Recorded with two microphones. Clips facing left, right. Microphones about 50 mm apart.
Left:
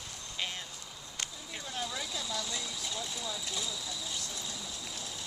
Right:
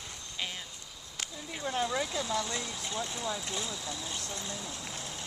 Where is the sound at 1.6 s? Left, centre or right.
Right.